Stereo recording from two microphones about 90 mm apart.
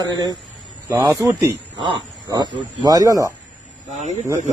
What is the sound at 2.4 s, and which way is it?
Speech, 60° right (ahead or behind).